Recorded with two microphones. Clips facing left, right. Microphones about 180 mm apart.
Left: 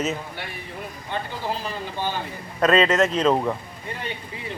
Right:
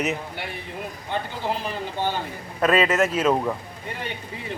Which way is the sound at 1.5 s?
15° right (ahead or behind).